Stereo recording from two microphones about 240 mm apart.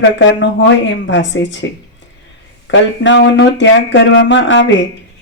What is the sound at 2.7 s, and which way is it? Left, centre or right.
Speech, left.